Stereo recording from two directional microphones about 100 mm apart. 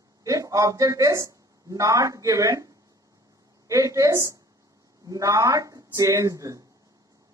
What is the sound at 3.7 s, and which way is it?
A woman's voice, 30° right (ahead or behind).